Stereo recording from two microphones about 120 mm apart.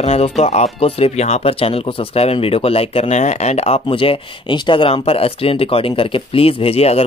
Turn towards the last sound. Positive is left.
turn(degrees=60)  # may be behind; listen again after turning